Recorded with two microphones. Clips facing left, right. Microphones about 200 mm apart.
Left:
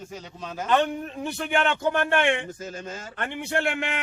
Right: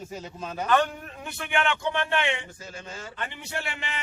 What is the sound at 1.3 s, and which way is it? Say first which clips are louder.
A man's voice: left 2 dB; 35° left (ahead or behind).